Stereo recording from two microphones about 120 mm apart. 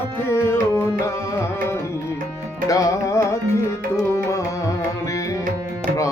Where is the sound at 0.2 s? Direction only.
20° left (ahead or behind).